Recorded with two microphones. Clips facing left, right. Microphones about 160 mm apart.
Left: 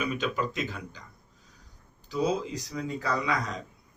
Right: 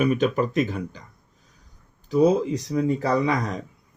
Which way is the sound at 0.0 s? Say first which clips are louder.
Right 9 dB; 50° right (ahead or behind).